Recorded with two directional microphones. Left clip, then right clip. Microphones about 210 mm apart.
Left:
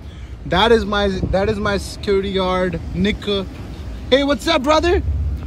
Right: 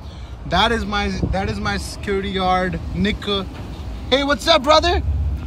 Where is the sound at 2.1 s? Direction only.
30° right (ahead or behind).